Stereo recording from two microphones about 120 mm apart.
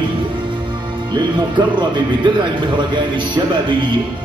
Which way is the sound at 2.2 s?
40° right (ahead or behind).